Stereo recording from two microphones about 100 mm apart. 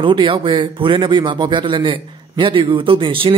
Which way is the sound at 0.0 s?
60° right (ahead or behind).